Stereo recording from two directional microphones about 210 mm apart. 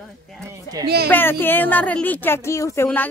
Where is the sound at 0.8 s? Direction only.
50° right (ahead or behind).